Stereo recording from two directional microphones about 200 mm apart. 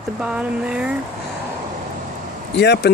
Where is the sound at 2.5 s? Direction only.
55° left (ahead or behind).